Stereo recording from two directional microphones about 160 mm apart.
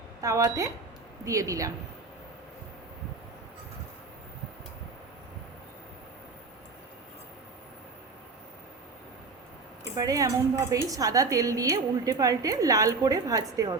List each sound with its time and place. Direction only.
0.2 s a woman's voice: 20° right (ahead or behind)
9.9 s a woman's voice: 20° right (ahead or behind)